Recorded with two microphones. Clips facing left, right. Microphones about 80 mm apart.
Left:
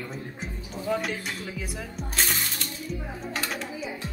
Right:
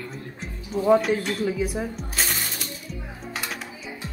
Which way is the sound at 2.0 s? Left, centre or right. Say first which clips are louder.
Even; centre.